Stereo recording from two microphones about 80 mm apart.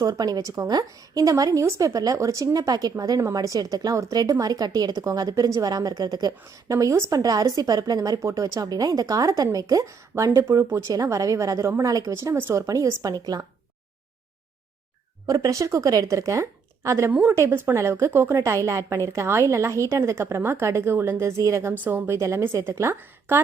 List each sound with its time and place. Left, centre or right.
0.0 s a woman's voice: right
8.3 s a woman's voice: right
12.3 s a woman's voice: right
12.5 s a woman's voice: right
15.3 s a woman's voice: right
17.1 s a woman's voice: centre; by 21.7 s right
21.7 s a woman's voice: right